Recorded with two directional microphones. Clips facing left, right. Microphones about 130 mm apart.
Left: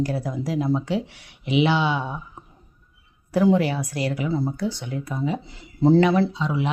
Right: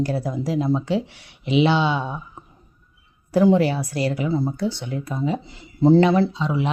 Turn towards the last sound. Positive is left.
turn(degrees=-25)  # may be behind; listen again after turning